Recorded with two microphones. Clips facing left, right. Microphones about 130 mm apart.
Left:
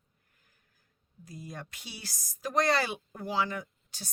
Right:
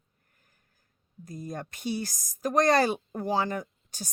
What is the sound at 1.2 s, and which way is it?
Speech, 45° right (ahead or behind).